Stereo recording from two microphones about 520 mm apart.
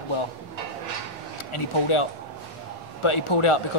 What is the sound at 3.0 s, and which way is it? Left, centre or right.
Speech, left.